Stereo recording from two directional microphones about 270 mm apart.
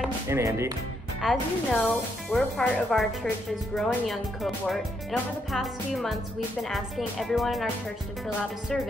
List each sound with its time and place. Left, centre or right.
0.0 s speech: centre
1.2 s speech: centre